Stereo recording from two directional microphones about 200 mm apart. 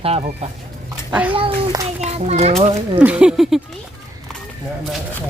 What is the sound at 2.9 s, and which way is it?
Speech, 5° right (ahead or behind).